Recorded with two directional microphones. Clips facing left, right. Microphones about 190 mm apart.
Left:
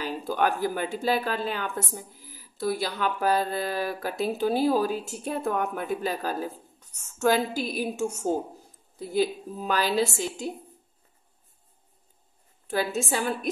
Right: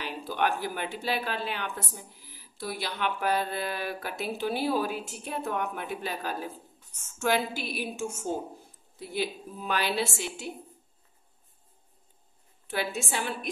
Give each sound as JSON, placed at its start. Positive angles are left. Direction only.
{"t": 0.0, "sound": "speech", "side_deg": 40}
{"t": 12.6, "sound": "speech", "side_deg": 40}